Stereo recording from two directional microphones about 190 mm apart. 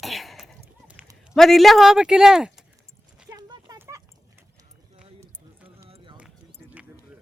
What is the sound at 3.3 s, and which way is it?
Clip-clop, 20° right (ahead or behind).